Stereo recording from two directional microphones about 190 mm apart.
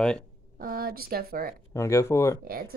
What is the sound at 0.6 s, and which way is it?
Speech, 50° right (ahead or behind).